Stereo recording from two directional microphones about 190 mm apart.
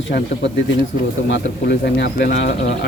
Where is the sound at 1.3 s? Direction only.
60° left (ahead or behind).